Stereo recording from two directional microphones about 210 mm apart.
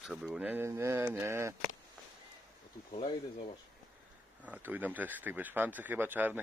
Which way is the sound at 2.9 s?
25° left (ahead or behind).